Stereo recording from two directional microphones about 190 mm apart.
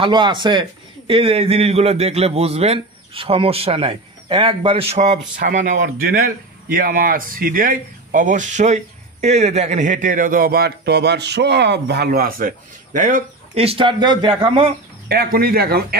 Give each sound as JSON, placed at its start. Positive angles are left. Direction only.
{"t": 0.0, "sound": "a man's voice", "side_deg": -25}
{"t": 15.0, "sound": "speech", "side_deg": -55}